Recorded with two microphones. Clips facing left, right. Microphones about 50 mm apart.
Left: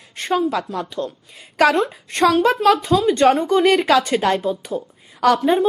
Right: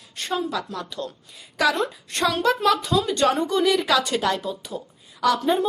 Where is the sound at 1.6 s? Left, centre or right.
Left.